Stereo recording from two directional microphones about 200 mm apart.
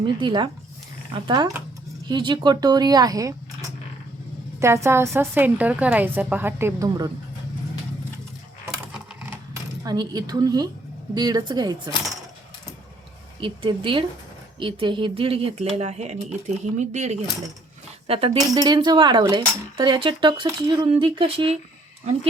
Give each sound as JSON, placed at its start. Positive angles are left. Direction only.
{"t": 0.0, "sound": "speech", "side_deg": -25}
{"t": 4.6, "sound": "a woman's voice", "side_deg": -15}
{"t": 9.8, "sound": "speech", "side_deg": -20}
{"t": 13.4, "sound": "speech", "side_deg": -25}
{"t": 18.3, "sound": "speech", "side_deg": -20}